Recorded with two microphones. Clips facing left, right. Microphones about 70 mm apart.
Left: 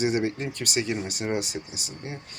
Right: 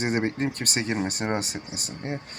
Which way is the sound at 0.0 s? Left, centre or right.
Right.